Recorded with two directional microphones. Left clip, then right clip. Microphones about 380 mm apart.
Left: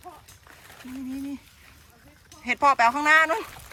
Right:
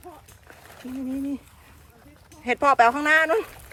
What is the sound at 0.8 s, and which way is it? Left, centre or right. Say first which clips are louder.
Speech: right 4 dB; centre.